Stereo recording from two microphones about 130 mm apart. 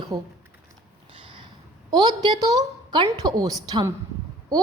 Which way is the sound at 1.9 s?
30° right (ahead or behind).